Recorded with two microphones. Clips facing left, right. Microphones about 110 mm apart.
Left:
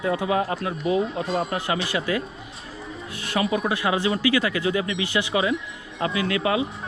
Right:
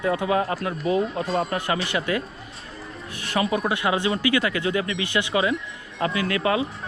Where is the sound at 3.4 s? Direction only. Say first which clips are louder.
Even; 35° right (ahead or behind).